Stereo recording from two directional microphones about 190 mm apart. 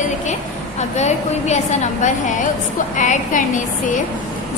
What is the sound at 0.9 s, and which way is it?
A woman's voice, 35° left (ahead or behind).